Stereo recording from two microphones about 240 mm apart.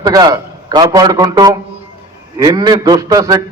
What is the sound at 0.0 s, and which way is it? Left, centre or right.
A man's voice, centre.